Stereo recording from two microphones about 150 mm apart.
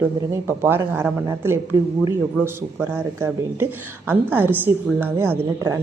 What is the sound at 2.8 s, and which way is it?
A woman's voice, 15° right (ahead or behind).